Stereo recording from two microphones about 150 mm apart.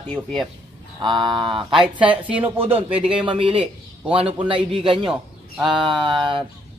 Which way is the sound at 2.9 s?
35° right (ahead or behind).